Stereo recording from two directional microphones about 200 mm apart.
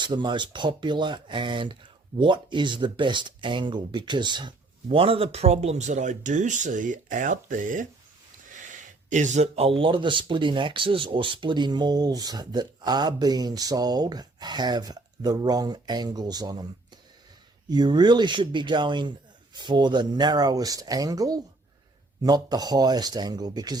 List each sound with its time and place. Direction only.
0.0 s speech: 20° right (ahead or behind)
17.7 s speech: 20° right (ahead or behind)